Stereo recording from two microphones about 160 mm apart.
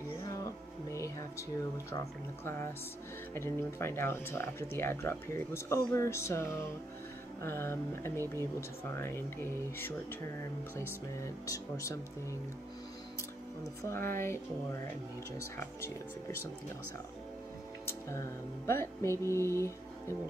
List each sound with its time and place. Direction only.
3.3 s speech: 15° left (ahead or behind)
11.4 s speech: 20° left (ahead or behind)
13.8 s speech: 15° left (ahead or behind)
18.7 s speech: 15° left (ahead or behind)